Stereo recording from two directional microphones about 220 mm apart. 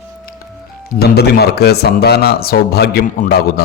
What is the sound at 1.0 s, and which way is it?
A man's voice, 45° left (ahead or behind).